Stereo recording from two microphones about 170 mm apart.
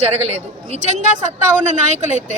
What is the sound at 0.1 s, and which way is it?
A woman's voice, 40° right (ahead or behind).